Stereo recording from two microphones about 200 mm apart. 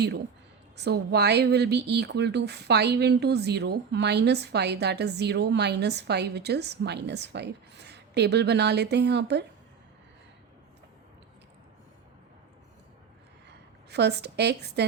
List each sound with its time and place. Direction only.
0.8 s speech: 55° right (ahead or behind)
13.9 s speech: 55° right (ahead or behind)